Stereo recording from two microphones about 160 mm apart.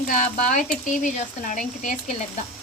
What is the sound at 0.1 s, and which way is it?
Speech, 55° left (ahead or behind).